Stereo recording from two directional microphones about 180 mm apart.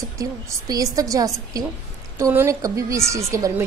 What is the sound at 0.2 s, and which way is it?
A woman's voice, 20° right (ahead or behind).